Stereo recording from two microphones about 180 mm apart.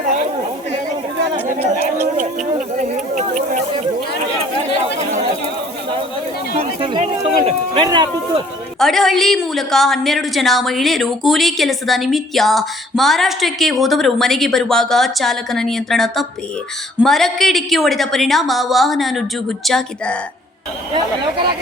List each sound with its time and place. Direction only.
1.5 s a woman's voice: 35° right (ahead or behind)
2.7 s a sound: 45° right (ahead or behind)
6.6 s speech: 30° right (ahead or behind)
8.8 s a woman's voice: centre (ahead or behind)